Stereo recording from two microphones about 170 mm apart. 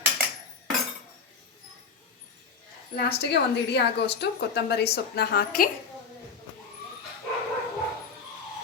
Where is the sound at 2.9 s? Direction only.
70° left (ahead or behind).